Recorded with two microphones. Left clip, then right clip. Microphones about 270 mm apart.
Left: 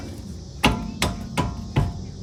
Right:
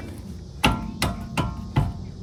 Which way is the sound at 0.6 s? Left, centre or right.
Centre.